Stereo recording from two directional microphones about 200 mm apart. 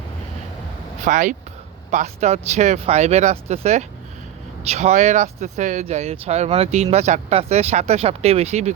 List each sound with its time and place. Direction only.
1.0 s speech: 40° right (ahead or behind)